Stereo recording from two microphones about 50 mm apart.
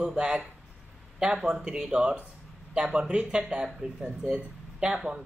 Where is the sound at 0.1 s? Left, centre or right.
Centre.